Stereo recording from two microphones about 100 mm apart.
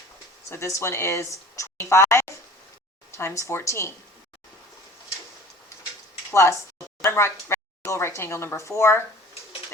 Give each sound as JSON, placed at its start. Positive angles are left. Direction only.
{"t": 0.5, "sound": "speech", "side_deg": 30}
{"t": 6.3, "sound": "speech", "side_deg": 30}